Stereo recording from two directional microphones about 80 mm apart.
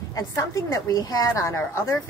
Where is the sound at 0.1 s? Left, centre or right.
Left.